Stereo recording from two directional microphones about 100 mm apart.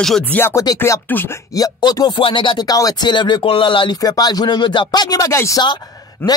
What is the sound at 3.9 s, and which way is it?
Speech, 40° left (ahead or behind).